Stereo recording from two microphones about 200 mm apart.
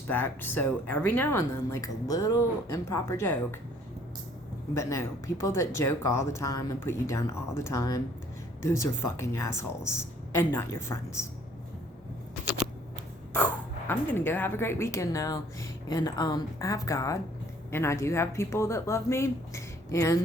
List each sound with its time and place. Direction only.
0.1 s speech: 10° left (ahead or behind)
4.7 s speech: 15° left (ahead or behind)
13.3 s speech: 10° left (ahead or behind)